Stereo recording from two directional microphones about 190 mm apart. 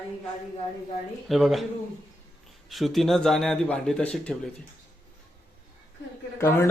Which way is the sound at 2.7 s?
Centre (ahead or behind).